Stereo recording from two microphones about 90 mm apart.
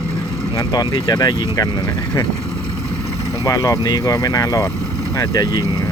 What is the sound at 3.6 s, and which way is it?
Speech, 45° left (ahead or behind).